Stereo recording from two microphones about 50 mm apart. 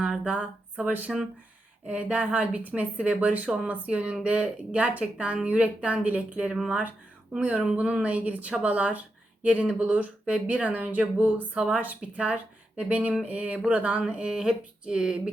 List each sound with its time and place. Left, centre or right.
0.3 s a woman's voice: right
14.1 s speech: centre